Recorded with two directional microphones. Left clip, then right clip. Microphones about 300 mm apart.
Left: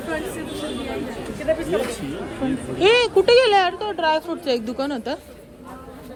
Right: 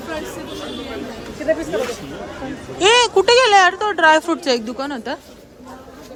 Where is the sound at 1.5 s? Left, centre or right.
Right.